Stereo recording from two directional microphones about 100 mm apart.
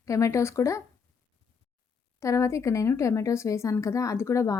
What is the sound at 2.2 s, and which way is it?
A woman's voice, 30° left (ahead or behind).